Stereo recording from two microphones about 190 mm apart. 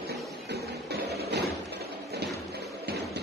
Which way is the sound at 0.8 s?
60° right (ahead or behind).